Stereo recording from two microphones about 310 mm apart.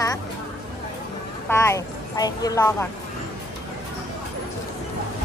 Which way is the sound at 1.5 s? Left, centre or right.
Centre.